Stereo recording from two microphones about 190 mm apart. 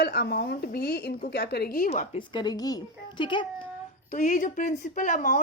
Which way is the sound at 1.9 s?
35° left (ahead or behind).